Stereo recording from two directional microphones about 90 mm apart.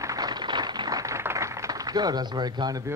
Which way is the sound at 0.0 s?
40° right (ahead or behind).